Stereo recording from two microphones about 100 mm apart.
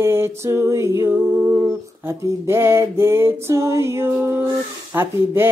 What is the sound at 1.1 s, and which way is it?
Humming, 15° right (ahead or behind).